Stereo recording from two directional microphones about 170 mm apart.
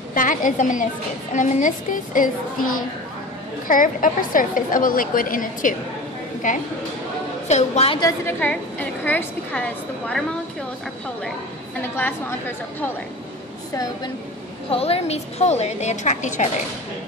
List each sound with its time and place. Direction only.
0.1 s a woman's voice: 50° left (ahead or behind)
3.6 s a woman's voice: 50° left (ahead or behind)
7.4 s a woman's voice: 40° left (ahead or behind)
8.0 s a woman's voice: 15° left (ahead or behind)
12.0 s a woman's voice: 10° left (ahead or behind)
14.7 s a woman's voice: 35° left (ahead or behind)